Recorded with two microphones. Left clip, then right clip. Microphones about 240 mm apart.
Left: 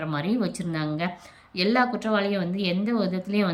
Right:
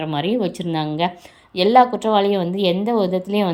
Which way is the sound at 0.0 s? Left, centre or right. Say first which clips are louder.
Right 7 dB; centre.